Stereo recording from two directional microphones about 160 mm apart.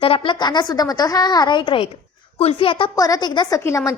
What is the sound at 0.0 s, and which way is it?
A woman's voice, 35° left (ahead or behind).